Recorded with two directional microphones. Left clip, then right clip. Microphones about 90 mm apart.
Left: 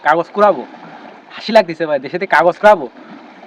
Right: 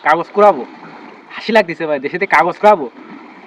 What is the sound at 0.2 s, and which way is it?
Speech, 40° left (ahead or behind).